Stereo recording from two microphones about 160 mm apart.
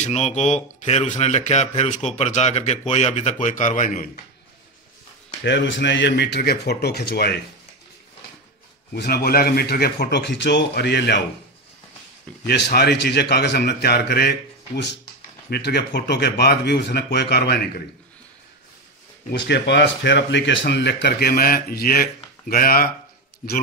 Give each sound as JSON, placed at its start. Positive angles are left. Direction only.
{"t": 0.0, "sound": "speech", "side_deg": 45}
{"t": 5.4, "sound": "speech", "side_deg": 90}
{"t": 8.9, "sound": "speech", "side_deg": 80}
{"t": 12.4, "sound": "speech", "side_deg": 90}
{"t": 15.5, "sound": "speech", "side_deg": 90}
{"t": 19.4, "sound": "speech", "side_deg": 90}